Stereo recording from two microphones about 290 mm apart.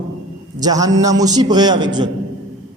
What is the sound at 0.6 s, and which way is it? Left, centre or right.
A man's voice, centre.